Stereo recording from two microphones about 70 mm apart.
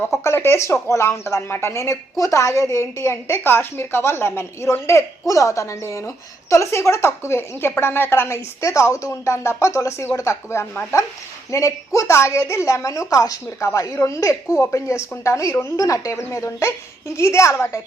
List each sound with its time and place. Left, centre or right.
0.3 s a woman's voice: left
8.6 s a woman's voice: left